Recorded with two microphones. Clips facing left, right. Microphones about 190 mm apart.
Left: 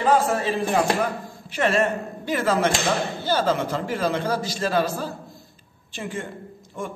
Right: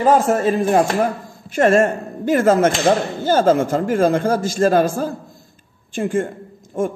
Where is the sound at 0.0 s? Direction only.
45° right (ahead or behind).